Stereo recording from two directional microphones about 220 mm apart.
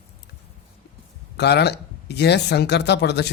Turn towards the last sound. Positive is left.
turn(degrees=50)  # may be behind; listen again after turning